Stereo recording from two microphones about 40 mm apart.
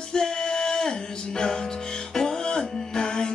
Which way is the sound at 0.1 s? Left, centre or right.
Centre.